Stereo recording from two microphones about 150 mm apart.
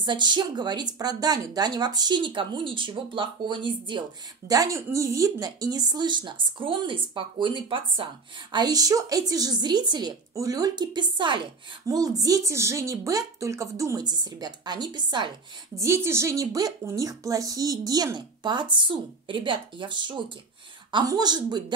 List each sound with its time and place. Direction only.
0.0 s speech: 30° right (ahead or behind)
4.5 s a woman's voice: 20° right (ahead or behind)
15.8 s a woman's voice: 15° right (ahead or behind)